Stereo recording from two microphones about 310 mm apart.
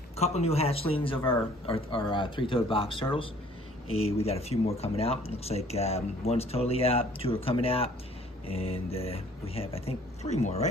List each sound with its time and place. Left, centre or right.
0.2 s a man's voice: centre